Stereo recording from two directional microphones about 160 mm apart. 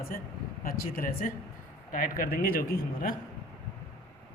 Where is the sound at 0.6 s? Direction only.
60° left (ahead or behind).